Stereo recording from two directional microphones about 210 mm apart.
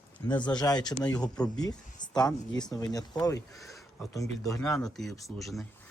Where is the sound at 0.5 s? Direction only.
20° left (ahead or behind).